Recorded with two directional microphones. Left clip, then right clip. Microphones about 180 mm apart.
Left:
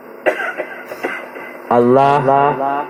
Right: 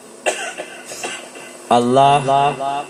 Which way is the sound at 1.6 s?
25° left (ahead or behind).